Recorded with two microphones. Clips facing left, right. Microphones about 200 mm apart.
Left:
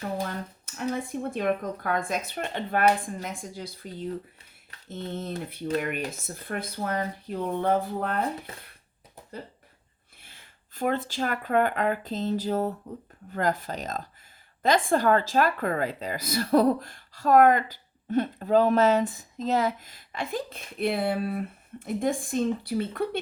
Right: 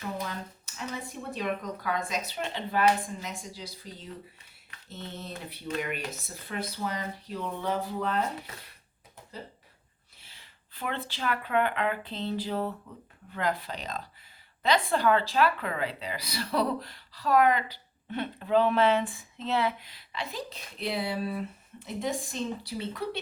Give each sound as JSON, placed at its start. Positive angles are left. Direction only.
{"t": 0.2, "sound": "speech", "side_deg": 50}
{"t": 10.2, "sound": "speech", "side_deg": 50}